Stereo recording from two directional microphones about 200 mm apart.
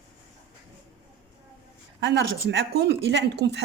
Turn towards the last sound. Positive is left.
turn(degrees=-60)  # may be behind; listen again after turning